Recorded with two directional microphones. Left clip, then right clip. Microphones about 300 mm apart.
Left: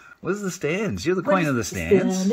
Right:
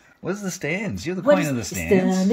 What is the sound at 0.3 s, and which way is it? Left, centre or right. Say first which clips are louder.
Speech: left 1 dB; centre.